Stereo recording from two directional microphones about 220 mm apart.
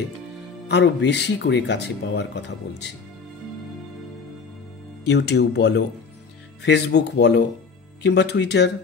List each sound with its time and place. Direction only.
0.7 s speech: 50° left (ahead or behind)
5.0 s speech: 50° left (ahead or behind)